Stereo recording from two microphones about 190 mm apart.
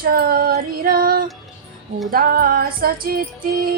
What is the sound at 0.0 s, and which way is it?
Female singing, 55° right (ahead or behind).